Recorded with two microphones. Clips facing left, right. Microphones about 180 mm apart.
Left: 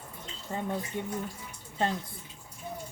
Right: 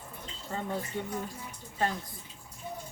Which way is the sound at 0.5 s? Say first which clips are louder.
Left 1 dB; 15° left (ahead or behind).